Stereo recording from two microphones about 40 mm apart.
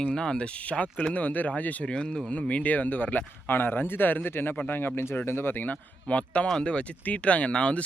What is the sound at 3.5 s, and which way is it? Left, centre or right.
Speech, left.